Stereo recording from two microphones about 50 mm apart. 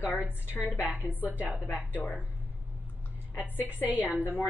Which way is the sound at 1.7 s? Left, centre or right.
Right.